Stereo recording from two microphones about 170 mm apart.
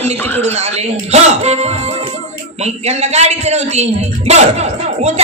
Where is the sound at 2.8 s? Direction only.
40° right (ahead or behind).